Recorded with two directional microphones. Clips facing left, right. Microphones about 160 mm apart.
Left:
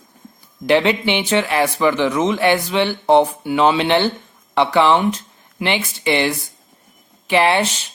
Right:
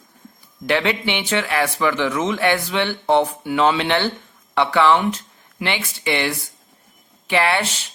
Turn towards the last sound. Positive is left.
turn(degrees=20)  # may be behind; listen again after turning